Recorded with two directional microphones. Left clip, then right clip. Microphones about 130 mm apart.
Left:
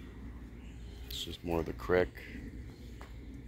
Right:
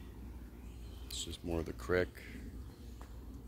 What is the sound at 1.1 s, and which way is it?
Speech, 25° right (ahead or behind).